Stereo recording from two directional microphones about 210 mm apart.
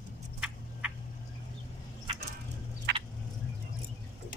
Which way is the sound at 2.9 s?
50° right (ahead or behind).